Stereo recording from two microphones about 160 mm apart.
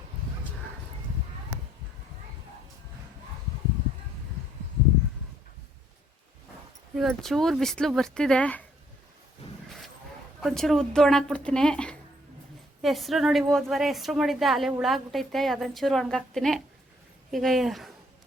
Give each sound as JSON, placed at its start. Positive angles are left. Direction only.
{"t": 6.9, "sound": "a woman's voice", "side_deg": 0}
{"t": 10.4, "sound": "a woman's voice", "side_deg": 0}